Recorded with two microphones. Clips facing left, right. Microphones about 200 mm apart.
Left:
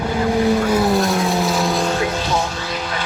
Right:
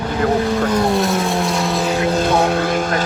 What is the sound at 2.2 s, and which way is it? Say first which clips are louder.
Vehicle: right 7 dB; 60° right (ahead or behind).